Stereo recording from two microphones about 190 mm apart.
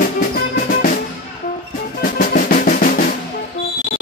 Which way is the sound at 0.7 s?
45° left (ahead or behind).